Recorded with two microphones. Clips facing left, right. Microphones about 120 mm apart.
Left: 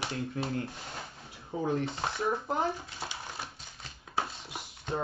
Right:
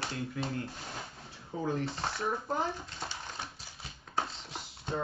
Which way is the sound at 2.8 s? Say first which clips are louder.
Left 1 dB; 10° left (ahead or behind).